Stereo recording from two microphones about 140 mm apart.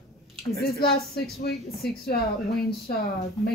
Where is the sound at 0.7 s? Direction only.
90° left.